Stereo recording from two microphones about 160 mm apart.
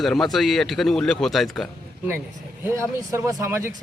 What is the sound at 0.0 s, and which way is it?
Speech, centre (ahead or behind).